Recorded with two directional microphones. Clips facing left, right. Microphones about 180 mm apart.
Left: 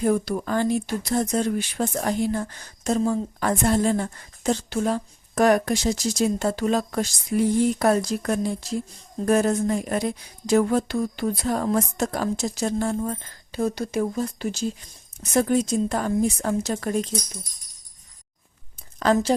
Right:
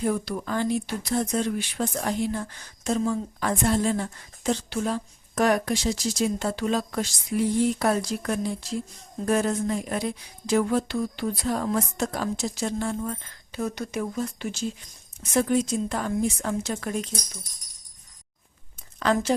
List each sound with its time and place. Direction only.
0.0 s a woman's voice: 45° left (ahead or behind)
19.1 s a woman's voice: 35° left (ahead or behind)